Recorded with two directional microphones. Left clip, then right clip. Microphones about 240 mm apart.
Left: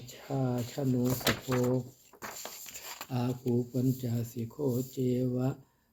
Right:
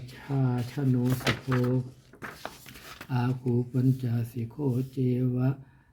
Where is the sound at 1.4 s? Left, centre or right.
Right.